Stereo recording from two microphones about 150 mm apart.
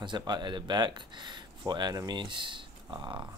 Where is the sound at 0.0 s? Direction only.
30° right (ahead or behind).